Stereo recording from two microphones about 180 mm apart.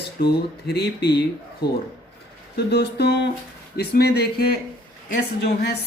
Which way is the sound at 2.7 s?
65° left (ahead or behind).